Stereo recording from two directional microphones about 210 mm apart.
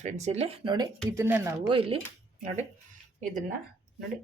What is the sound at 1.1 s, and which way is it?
Speech, 10° right (ahead or behind).